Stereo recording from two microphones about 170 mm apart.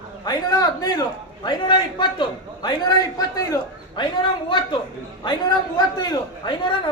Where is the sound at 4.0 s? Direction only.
30° left (ahead or behind).